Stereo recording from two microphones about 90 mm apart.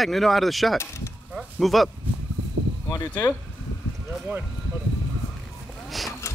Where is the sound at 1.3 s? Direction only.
Centre (ahead or behind).